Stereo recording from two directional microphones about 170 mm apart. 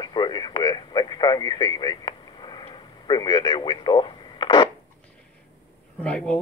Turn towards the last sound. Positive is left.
turn(degrees=5)  # may be behind; listen again after turning